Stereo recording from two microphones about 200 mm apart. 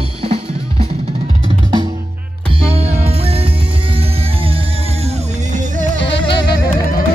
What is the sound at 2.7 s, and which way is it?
Music, 30° right (ahead or behind).